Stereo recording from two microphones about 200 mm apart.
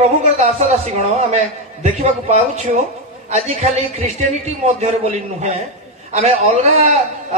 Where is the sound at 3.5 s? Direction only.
30° right (ahead or behind).